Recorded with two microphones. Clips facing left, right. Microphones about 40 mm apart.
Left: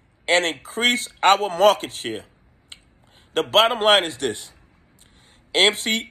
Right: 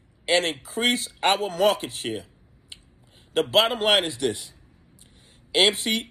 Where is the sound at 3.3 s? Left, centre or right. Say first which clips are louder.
Left 3 dB; left.